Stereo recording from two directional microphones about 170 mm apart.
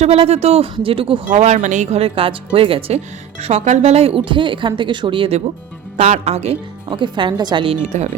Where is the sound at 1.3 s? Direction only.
45° right (ahead or behind).